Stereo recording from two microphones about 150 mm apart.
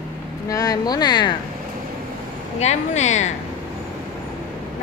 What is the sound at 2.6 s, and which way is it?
Speech, 50° left (ahead or behind).